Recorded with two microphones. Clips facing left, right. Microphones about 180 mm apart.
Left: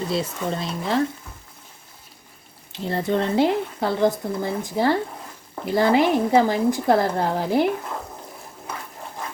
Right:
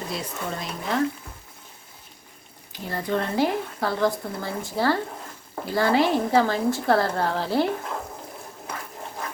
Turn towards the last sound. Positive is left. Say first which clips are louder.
# left 3 dB
turn(degrees=15)  # may be behind; listen again after turning